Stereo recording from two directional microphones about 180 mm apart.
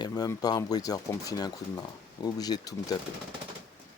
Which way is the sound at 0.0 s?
20° left (ahead or behind).